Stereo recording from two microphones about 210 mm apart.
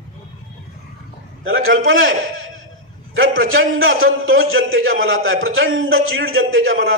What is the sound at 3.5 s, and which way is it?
A man's voice, 70° right (ahead or behind).